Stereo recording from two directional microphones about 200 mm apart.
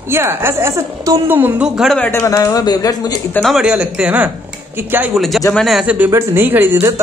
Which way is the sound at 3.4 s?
Centre (ahead or behind).